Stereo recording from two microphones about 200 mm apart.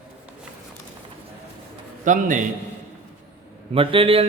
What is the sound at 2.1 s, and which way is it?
Speech, 40° right (ahead or behind).